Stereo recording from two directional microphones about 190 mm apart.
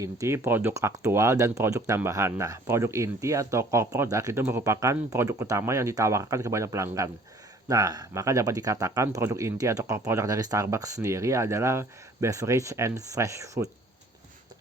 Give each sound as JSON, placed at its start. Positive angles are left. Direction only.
{"t": 0.0, "sound": "speech", "side_deg": -15}